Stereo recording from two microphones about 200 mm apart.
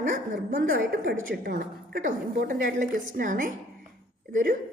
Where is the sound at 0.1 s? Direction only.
45° right (ahead or behind).